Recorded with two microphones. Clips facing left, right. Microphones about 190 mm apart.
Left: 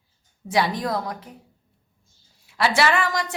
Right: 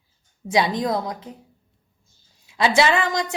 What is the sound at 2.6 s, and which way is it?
Speech, 20° right (ahead or behind).